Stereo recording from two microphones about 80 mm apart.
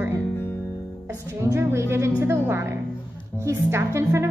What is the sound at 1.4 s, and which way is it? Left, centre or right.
A woman's voice, right.